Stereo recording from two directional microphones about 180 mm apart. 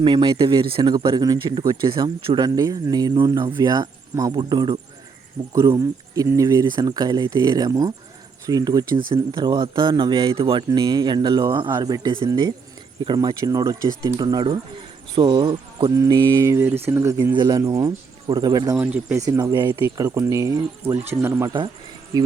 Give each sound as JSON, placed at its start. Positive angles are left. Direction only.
{"t": 0.0, "sound": "speech", "side_deg": -25}
{"t": 18.9, "sound": "speech", "side_deg": -5}
{"t": 19.2, "sound": "speech", "side_deg": -20}
{"t": 19.8, "sound": "speech", "side_deg": -10}